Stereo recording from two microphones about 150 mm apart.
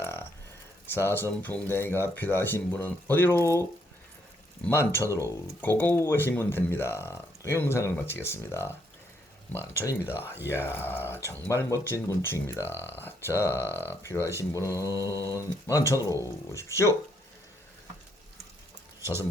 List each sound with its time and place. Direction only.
0.0 s a sound: 15° left (ahead or behind)
0.9 s speech: 15° left (ahead or behind)
9.8 s speech: 20° left (ahead or behind)
10.3 s speech: 15° right (ahead or behind)
10.7 s speech: 15° left (ahead or behind)
13.6 s speech: 15° right (ahead or behind)
13.8 s speech: 15° left (ahead or behind)
14.9 s mantra: 20° right (ahead or behind)
15.3 s speech: 20° left (ahead or behind)